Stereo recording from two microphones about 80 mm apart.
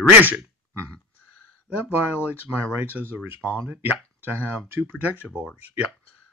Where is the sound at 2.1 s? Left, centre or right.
Right.